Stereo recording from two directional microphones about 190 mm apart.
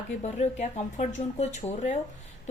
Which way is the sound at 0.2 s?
35° left (ahead or behind).